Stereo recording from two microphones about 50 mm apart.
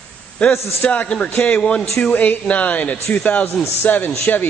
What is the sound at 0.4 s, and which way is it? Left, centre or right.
A man's voice, left.